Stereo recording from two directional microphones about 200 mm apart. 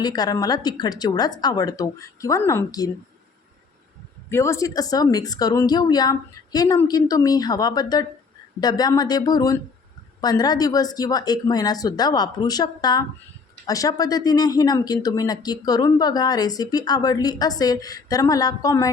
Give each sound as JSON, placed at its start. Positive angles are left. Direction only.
{"t": 0.0, "sound": "speech", "side_deg": 20}
{"t": 4.3, "sound": "speech", "side_deg": 15}